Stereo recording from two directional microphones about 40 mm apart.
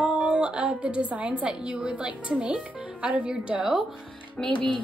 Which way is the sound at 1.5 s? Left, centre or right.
Right.